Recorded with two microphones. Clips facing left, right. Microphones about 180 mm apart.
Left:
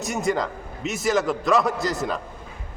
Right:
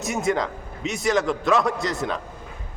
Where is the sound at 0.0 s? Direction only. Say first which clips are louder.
Right 1 dB; centre (ahead or behind).